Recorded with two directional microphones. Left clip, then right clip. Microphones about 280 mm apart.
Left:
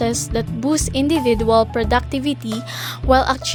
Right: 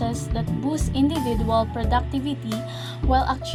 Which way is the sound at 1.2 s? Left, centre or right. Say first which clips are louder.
Left 8 dB; left.